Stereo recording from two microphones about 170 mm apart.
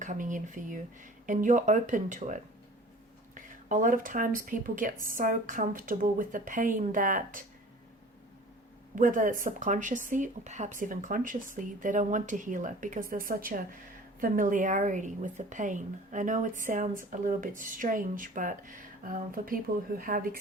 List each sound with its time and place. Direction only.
0.0 s speech: 50° right (ahead or behind)
9.0 s speech: 50° right (ahead or behind)